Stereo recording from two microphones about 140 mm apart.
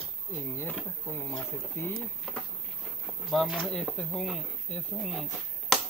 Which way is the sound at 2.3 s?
5° left (ahead or behind).